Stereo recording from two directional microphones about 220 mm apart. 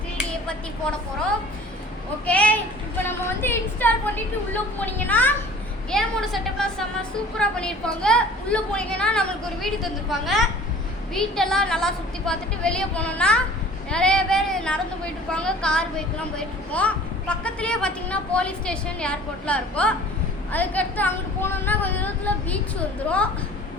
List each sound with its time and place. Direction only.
2.2 s a woman's voice: 5° left (ahead or behind)